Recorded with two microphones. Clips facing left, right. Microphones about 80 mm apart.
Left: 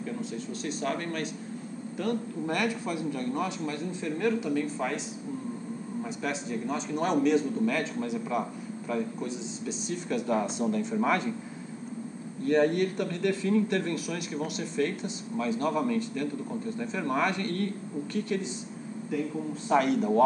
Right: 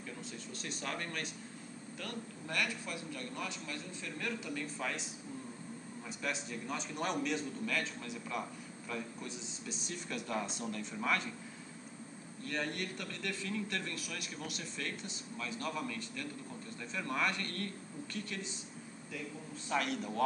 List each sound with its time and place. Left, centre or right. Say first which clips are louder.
0.7 s a man's voice: left 9 dB; centre
2.0 s a man's voice: left 15 dB; left
6.2 s a man's voice: left 6 dB; centre
12.4 s a man's voice: left 15 dB; left
14.3 s a man's voice: left 12 dB; left
19.7 s a man's voice: left 11 dB; centre